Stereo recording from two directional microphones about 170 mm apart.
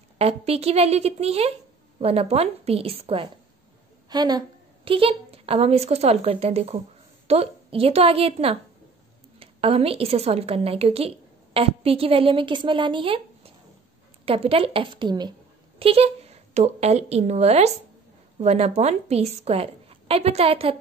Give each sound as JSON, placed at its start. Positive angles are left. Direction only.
{"t": 0.2, "sound": "a woman's voice", "side_deg": -35}
{"t": 4.1, "sound": "a woman's voice", "side_deg": -25}